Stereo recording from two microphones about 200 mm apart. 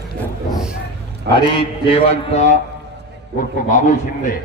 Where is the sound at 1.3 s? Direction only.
25° left (ahead or behind).